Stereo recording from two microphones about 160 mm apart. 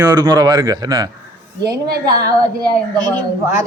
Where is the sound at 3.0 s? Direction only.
25° right (ahead or behind).